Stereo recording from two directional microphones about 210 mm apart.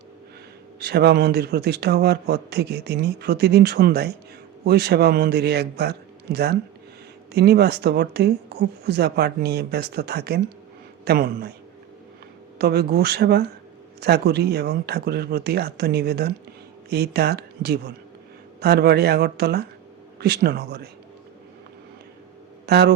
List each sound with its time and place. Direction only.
0.8 s speech: 50° right (ahead or behind)
12.5 s speech: 50° right (ahead or behind)
22.6 s speech: 50° right (ahead or behind)